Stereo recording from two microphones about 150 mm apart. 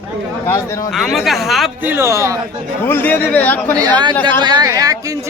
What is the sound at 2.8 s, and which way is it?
Speech, 15° left (ahead or behind).